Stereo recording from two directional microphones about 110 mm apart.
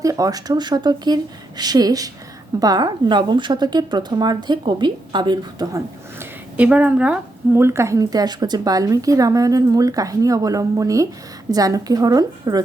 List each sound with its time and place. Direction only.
0.0 s a woman's voice: 30° right (ahead or behind)
6.1 s a woman's voice: 10° right (ahead or behind); by 12.6 s 35° right (ahead or behind)